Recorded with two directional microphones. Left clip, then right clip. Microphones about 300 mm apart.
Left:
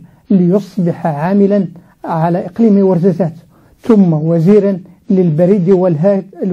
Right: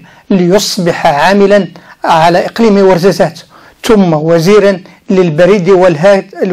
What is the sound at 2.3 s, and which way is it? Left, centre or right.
Speech, centre.